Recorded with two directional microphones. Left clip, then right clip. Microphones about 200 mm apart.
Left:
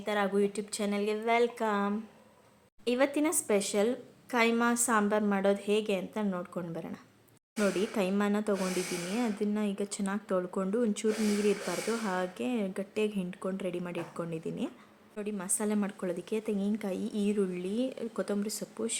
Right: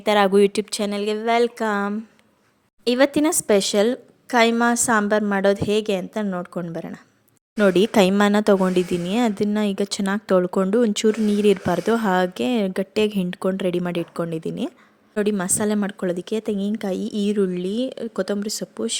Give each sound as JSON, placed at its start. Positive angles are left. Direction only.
{"t": 0.0, "sound": "a woman's voice", "side_deg": -55}
{"t": 7.6, "sound": "a woman's voice", "side_deg": -50}